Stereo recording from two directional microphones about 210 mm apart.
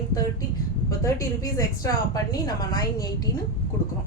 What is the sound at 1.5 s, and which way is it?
A woman's voice, 15° left (ahead or behind).